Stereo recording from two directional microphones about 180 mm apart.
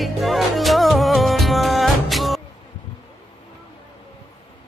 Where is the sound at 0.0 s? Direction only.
Centre (ahead or behind).